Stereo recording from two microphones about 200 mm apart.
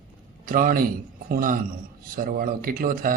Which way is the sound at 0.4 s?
45° right (ahead or behind).